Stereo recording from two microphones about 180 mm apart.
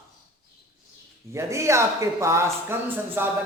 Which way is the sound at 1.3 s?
15° right (ahead or behind).